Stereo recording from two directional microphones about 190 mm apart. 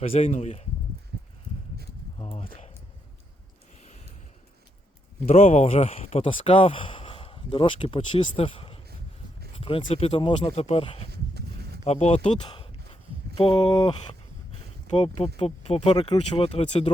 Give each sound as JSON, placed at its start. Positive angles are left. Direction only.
{"t": 0.0, "sound": "speech", "side_deg": 30}
{"t": 2.1, "sound": "a sound", "side_deg": 30}
{"t": 5.3, "sound": "speech", "side_deg": 35}
{"t": 11.1, "sound": "walk", "side_deg": -60}
{"t": 11.9, "sound": "speech", "side_deg": 30}
{"t": 14.9, "sound": "speech", "side_deg": 30}